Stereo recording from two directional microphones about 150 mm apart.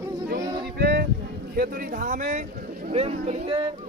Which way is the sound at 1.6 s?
70° right (ahead or behind).